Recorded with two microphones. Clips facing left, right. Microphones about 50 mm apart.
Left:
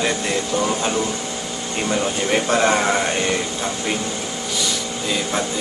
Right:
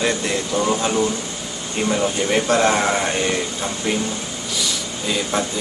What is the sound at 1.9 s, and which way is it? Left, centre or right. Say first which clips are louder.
Speech: right 1 dB; centre.